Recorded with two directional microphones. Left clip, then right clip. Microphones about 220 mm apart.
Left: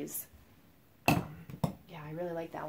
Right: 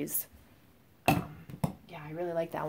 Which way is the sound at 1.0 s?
Centre (ahead or behind).